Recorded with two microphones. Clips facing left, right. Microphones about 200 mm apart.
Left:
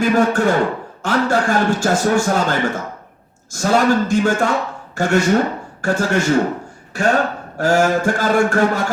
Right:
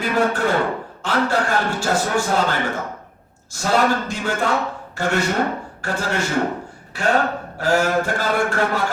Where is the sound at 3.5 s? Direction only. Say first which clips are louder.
Left 4 dB; 45° left (ahead or behind).